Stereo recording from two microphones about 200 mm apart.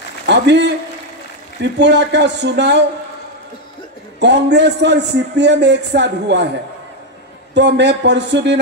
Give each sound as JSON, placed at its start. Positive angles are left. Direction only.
{"t": 0.3, "sound": "a man's voice", "side_deg": -60}
{"t": 4.2, "sound": "a man's voice", "side_deg": -60}
{"t": 7.5, "sound": "a man's voice", "side_deg": -60}